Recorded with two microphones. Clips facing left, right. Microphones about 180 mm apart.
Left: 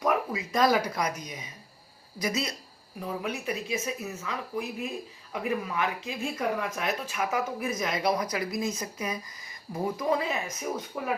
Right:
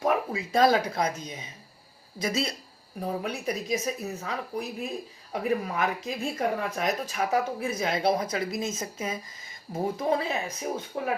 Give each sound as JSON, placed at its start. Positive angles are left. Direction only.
{"t": 0.0, "sound": "speech", "side_deg": -30}